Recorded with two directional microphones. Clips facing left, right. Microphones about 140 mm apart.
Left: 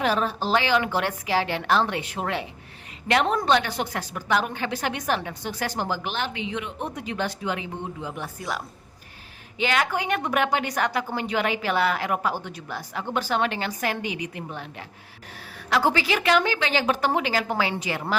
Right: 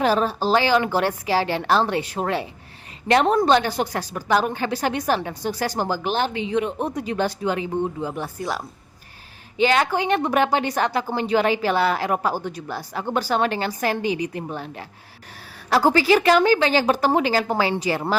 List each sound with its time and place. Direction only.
0.0 s a woman's voice: 35° right (ahead or behind)
9.6 s a woman's voice: 35° right (ahead or behind)